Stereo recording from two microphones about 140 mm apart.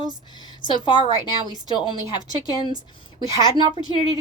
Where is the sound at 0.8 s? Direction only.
35° left (ahead or behind).